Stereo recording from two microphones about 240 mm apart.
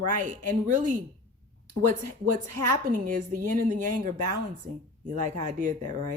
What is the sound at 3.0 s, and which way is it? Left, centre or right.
Speech, right.